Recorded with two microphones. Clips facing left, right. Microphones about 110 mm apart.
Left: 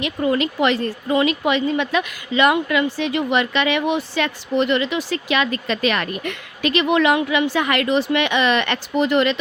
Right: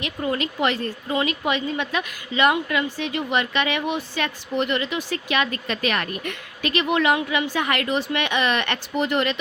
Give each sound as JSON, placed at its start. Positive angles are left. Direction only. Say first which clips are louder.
{"t": 0.0, "sound": "speech", "louder": "left 6 dB", "side_deg": 90}